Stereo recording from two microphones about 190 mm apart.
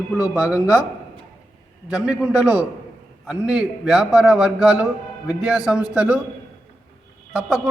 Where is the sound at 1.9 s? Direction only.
5° right (ahead or behind).